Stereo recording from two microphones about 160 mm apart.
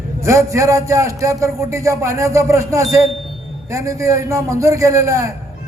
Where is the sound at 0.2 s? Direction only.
20° right (ahead or behind).